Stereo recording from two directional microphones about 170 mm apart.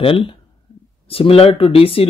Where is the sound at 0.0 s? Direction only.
35° left (ahead or behind).